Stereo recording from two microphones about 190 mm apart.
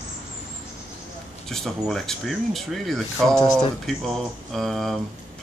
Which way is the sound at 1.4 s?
Centre (ahead or behind).